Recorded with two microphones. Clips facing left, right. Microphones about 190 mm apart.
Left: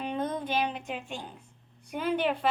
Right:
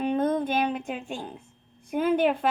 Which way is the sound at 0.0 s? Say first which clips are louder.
Right 7 dB; 50° right (ahead or behind).